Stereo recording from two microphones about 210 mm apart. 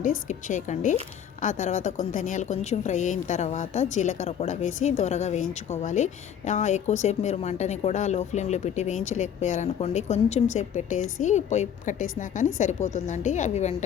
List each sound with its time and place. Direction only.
0.3 s a woman's voice: 35° left (ahead or behind)